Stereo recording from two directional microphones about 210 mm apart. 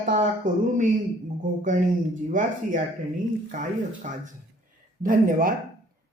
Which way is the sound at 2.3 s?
35° right (ahead or behind).